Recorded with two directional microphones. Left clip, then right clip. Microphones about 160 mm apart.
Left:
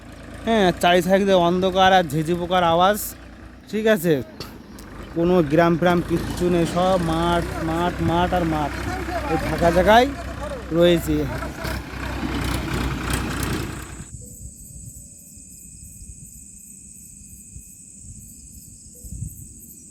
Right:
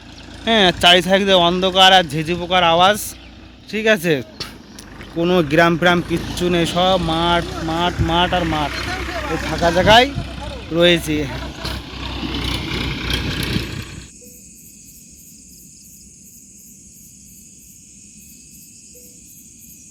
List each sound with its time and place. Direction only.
0.1 s vehicle: 35° left (ahead or behind)
0.4 s speech: centre (ahead or behind)
4.5 s a sound: 40° right (ahead or behind)
5.2 s speech: centre (ahead or behind)
6.0 s speech: 45° right (ahead or behind)
6.4 s speech: 5° right (ahead or behind)
7.4 s speech: 45° left (ahead or behind)
7.7 s speech: 5° right (ahead or behind)
8.7 s vehicle: 90° left; by 9.5 s 70° left (ahead or behind)
9.7 s speech: 5° left (ahead or behind)
10.1 s vehicle: 10° left (ahead or behind)